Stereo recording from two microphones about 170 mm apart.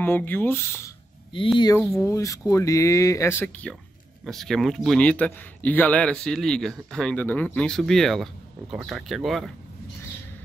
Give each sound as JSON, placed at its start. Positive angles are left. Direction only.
{"t": 0.0, "sound": "a man's voice", "side_deg": 10}